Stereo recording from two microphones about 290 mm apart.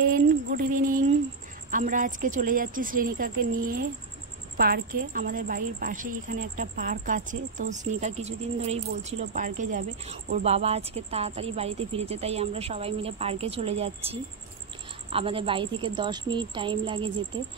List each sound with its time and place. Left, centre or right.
0.1 s speech: right
9.3 s a woman's voice: right